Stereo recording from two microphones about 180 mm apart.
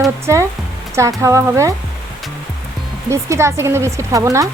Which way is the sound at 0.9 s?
15° right (ahead or behind).